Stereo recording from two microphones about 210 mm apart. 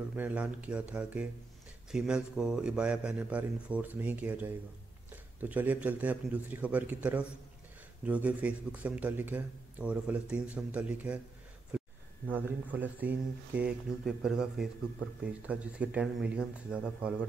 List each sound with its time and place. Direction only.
0.1 s speech: 5° right (ahead or behind)
12.3 s speech: 10° right (ahead or behind)